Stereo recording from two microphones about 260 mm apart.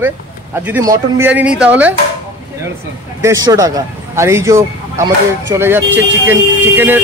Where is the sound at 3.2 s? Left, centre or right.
Centre.